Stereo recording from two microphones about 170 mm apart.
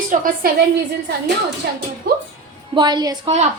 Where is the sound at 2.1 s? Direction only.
60° right (ahead or behind).